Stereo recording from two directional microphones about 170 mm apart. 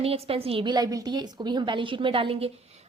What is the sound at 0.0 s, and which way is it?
A woman's voice, 35° right (ahead or behind).